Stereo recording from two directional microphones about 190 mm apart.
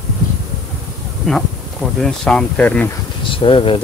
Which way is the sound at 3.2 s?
25° left (ahead or behind).